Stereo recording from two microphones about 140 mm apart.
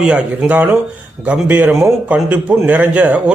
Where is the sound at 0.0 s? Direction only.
10° right (ahead or behind).